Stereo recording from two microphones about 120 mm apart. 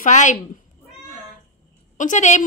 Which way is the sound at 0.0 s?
90° left.